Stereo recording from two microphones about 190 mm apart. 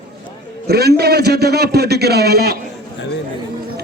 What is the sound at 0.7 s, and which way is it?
A man's voice, 55° right (ahead or behind).